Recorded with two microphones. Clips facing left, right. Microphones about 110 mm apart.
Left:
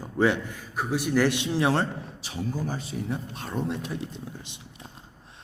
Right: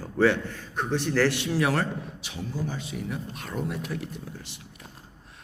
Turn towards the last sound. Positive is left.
turn(degrees=25)  # may be behind; listen again after turning